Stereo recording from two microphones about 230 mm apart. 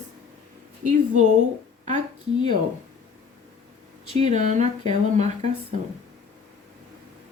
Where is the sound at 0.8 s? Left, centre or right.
Right.